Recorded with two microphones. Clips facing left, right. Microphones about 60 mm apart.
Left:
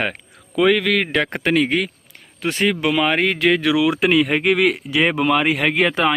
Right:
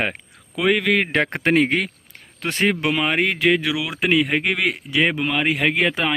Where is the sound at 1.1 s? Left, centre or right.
Right.